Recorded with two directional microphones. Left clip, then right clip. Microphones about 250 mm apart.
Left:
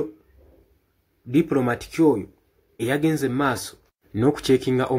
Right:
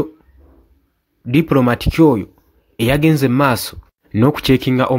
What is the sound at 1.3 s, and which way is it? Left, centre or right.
Speech, right.